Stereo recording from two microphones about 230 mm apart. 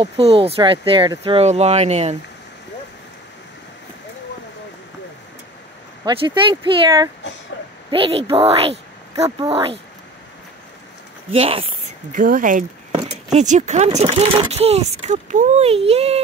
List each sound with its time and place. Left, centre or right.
0.0 s speech: right
6.0 s speech: right
11.3 s speech: right
12.1 s speech: right